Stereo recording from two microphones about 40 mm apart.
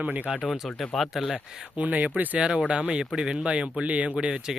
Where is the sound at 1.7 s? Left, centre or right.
Right.